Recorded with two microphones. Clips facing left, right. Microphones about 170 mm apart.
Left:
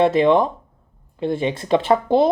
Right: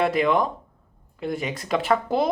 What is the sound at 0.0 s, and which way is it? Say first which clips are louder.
Speech: left 6 dB; 25° left (ahead or behind).